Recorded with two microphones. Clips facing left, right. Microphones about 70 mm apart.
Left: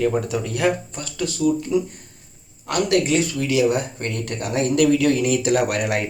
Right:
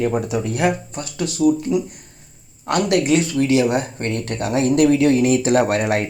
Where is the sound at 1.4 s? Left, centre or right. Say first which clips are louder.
Right 4 dB; right.